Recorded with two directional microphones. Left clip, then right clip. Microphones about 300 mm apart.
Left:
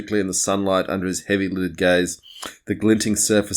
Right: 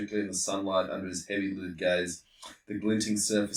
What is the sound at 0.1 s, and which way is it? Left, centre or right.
Speech, left.